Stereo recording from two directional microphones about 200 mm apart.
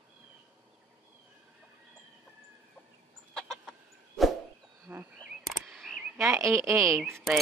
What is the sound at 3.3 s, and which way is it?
Chicken, centre (ahead or behind).